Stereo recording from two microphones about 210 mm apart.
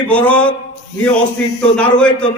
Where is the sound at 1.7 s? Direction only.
5° left (ahead or behind).